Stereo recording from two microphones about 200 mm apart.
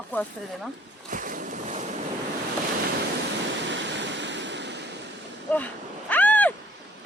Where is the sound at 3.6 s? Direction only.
65° right (ahead or behind).